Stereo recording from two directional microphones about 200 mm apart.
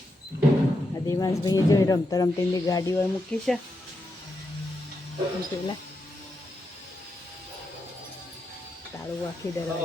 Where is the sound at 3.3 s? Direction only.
5° left (ahead or behind).